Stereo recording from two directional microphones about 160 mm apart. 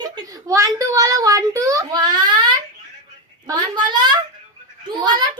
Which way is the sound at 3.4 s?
25° right (ahead or behind).